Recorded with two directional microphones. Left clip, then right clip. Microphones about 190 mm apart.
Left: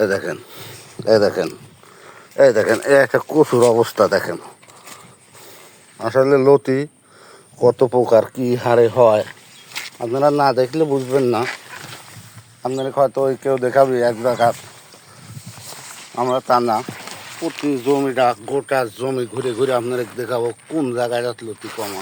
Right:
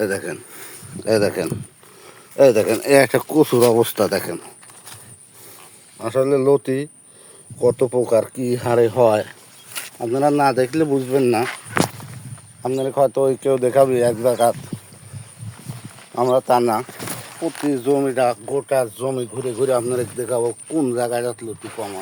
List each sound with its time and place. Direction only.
0.0 s speech: 5° right (ahead or behind)
6.0 s speech: centre (ahead or behind); by 11.4 s 20° right (ahead or behind)
12.6 s speech: 15° right (ahead or behind)
16.1 s speech: 25° right (ahead or behind)
17.6 s speech: 15° right (ahead or behind)